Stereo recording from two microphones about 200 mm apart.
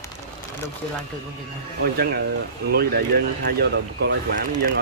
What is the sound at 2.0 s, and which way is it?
Speech, 50° right (ahead or behind).